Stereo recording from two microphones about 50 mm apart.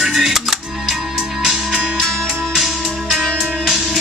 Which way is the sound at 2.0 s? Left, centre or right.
Centre.